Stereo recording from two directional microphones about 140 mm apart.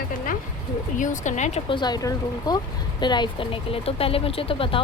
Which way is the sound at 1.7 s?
30° left (ahead or behind).